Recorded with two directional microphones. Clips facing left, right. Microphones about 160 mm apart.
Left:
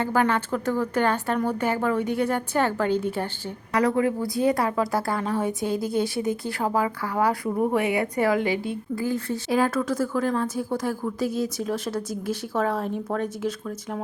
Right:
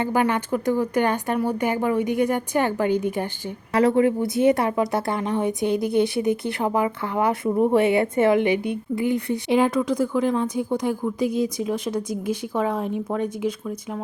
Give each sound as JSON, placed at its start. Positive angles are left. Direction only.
{"t": 0.0, "sound": "a woman's voice", "side_deg": -15}
{"t": 3.7, "sound": "a woman's voice", "side_deg": -25}